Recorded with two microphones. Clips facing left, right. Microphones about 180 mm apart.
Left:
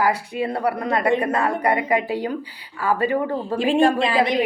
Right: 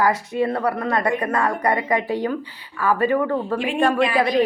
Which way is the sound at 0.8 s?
25° left (ahead or behind).